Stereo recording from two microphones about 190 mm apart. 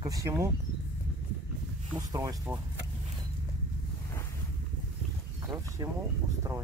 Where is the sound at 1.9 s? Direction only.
20° right (ahead or behind).